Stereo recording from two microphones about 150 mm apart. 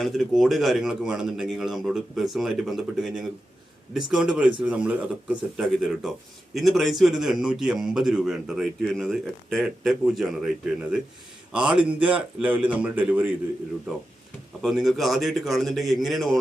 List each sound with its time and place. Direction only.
0.0 s a man's voice: centre (ahead or behind)
11.5 s a man's voice: 5° right (ahead or behind)
14.6 s speech: centre (ahead or behind)